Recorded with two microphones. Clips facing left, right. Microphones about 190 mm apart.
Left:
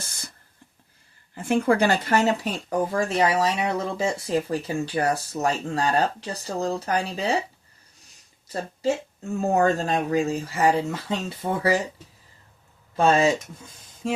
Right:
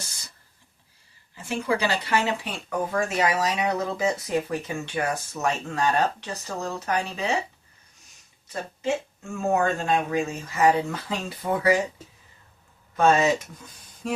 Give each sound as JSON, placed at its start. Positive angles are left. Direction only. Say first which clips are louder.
{"t": 0.0, "sound": "a sound", "louder": "left 3 dB", "side_deg": 55}
{"t": 1.4, "sound": "speech", "louder": "left 5 dB", "side_deg": 55}
{"t": 8.8, "sound": "speech", "louder": "left 2 dB", "side_deg": 35}
{"t": 13.0, "sound": "speech", "louder": "left 1 dB", "side_deg": 30}